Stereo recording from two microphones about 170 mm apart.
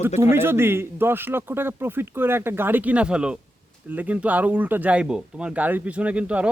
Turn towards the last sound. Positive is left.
turn(degrees=-5)  # may be behind; listen again after turning